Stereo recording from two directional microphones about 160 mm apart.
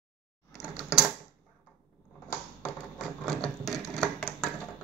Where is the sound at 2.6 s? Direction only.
5° left (ahead or behind).